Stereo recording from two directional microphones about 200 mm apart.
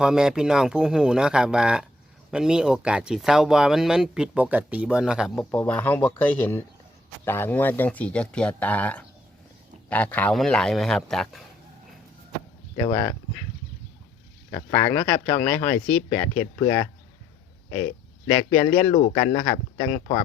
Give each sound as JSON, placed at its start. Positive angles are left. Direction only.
{"t": 0.0, "sound": "speech", "side_deg": -5}
{"t": 5.3, "sound": "speech", "side_deg": 10}
{"t": 12.8, "sound": "speech", "side_deg": 15}
{"t": 14.5, "sound": "speech", "side_deg": 15}
{"t": 18.9, "sound": "speech", "side_deg": 30}